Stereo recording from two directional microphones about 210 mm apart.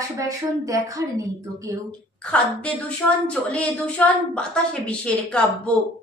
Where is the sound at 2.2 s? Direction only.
5° left (ahead or behind).